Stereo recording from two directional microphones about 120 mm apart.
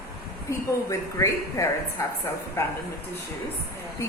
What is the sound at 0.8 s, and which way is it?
A woman's voice, 25° left (ahead or behind).